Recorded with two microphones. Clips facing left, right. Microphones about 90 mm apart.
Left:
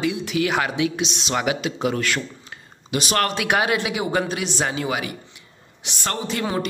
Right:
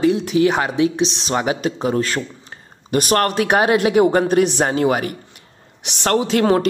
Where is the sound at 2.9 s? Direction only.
45° right (ahead or behind).